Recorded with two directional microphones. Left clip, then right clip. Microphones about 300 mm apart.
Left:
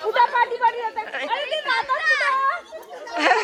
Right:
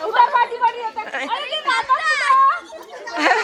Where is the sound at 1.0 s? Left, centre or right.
Centre.